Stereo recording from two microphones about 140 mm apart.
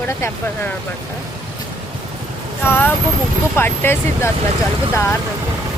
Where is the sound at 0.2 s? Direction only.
15° left (ahead or behind).